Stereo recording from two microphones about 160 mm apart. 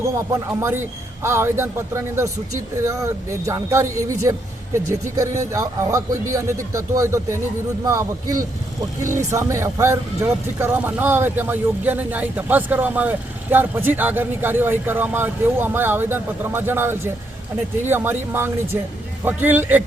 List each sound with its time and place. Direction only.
0.6 s a man's voice: 15° right (ahead or behind)